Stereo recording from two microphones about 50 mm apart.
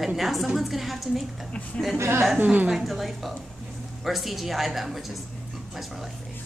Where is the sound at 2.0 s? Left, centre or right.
Right.